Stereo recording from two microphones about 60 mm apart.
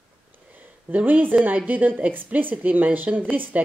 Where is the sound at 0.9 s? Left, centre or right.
Right.